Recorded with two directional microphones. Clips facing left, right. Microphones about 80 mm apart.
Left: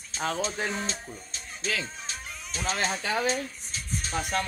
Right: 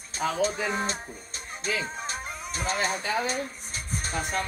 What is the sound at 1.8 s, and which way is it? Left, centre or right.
Music, right.